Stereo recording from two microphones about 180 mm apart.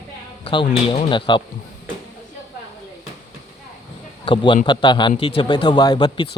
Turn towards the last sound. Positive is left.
turn(degrees=25)  # may be behind; listen again after turning